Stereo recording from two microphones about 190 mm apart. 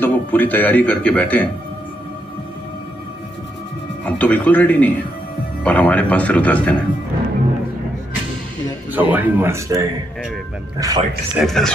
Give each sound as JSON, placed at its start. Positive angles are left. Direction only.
{"t": 0.0, "sound": "speech", "side_deg": 10}
{"t": 4.0, "sound": "speech", "side_deg": 10}
{"t": 8.9, "sound": "speech", "side_deg": -10}
{"t": 11.3, "sound": "speech", "side_deg": 0}